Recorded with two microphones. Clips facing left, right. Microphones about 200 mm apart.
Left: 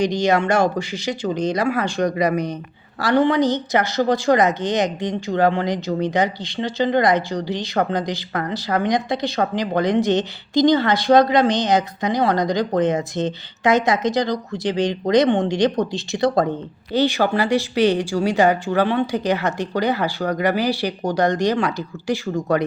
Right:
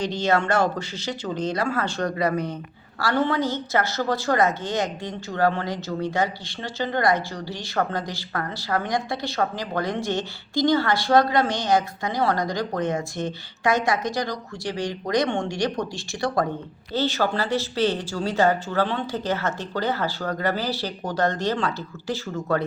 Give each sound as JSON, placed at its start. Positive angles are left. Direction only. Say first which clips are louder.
{"t": 0.0, "sound": "a woman's voice", "louder": "left 5 dB", "side_deg": 15}